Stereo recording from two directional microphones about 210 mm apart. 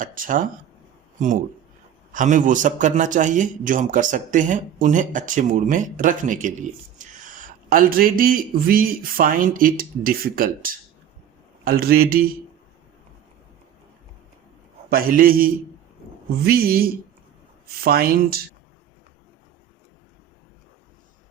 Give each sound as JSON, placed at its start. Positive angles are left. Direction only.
{"t": 0.0, "sound": "a man's voice", "side_deg": -40}
{"t": 2.1, "sound": "a man's voice", "side_deg": -40}
{"t": 14.8, "sound": "a man's voice", "side_deg": -45}